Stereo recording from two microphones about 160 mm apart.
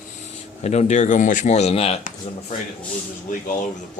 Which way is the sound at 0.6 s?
45° left (ahead or behind).